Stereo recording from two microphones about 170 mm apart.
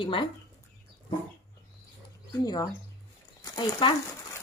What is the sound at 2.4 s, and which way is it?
Speech, 20° left (ahead or behind).